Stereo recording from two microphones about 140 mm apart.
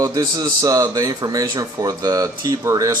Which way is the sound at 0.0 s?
25° right (ahead or behind).